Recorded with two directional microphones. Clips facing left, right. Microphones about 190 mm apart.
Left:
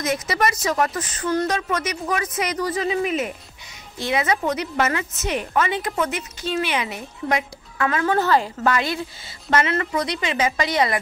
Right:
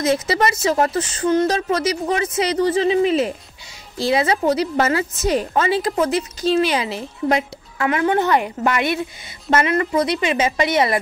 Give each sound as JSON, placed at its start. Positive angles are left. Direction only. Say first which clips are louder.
{"t": 0.0, "sound": "a woman's voice", "louder": "right 4 dB", "side_deg": -30}